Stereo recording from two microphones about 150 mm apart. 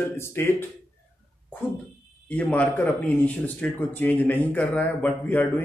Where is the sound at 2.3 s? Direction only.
10° left (ahead or behind).